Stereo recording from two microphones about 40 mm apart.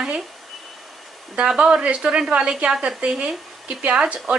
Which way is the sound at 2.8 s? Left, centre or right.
Right.